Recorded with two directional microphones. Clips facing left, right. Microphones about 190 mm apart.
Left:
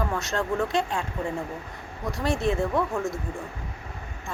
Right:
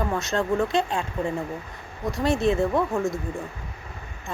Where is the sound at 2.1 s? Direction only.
20° right (ahead or behind).